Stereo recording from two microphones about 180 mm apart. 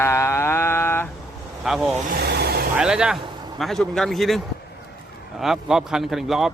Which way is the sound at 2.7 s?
5° right (ahead or behind).